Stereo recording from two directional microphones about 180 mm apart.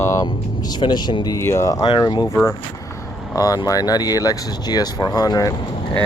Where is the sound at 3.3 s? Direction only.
20° left (ahead or behind).